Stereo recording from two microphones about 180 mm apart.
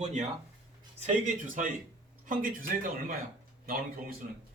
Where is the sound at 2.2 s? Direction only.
50° right (ahead or behind).